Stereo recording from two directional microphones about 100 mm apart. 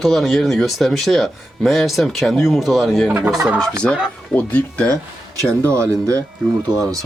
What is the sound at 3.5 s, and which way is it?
Speech, 10° left (ahead or behind).